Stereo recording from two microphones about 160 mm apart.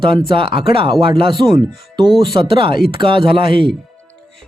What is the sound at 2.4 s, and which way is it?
Speech, 30° right (ahead or behind).